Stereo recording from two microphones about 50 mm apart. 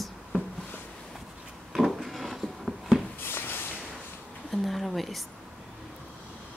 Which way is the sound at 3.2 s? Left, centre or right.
Left.